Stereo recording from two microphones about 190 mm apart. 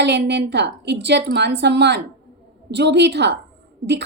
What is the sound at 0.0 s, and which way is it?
A woman's voice, 65° right (ahead or behind).